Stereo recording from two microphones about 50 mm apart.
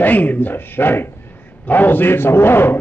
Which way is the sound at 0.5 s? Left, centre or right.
Left.